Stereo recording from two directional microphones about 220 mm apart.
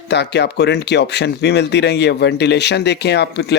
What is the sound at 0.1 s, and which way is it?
Speech, 50° left (ahead or behind).